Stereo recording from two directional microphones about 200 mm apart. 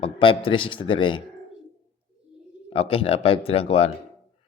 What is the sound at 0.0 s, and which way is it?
A man's voice, 25° left (ahead or behind).